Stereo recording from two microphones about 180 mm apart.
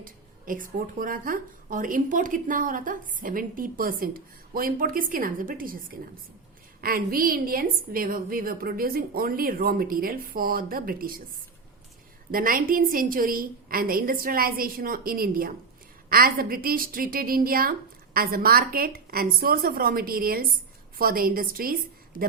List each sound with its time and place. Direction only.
0.0 s speech: 50° right (ahead or behind)
12.3 s a woman's voice: 50° right (ahead or behind)
22.1 s speech: 50° left (ahead or behind)